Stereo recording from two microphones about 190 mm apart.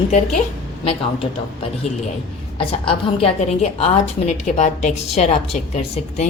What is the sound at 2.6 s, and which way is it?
A woman's voice, 30° left (ahead or behind).